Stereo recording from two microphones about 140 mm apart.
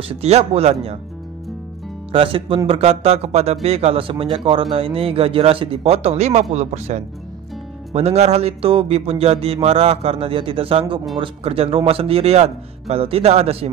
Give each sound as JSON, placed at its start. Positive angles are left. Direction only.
{"t": 0.1, "sound": "a man's voice", "side_deg": -50}
{"t": 2.1, "sound": "a man's voice", "side_deg": -40}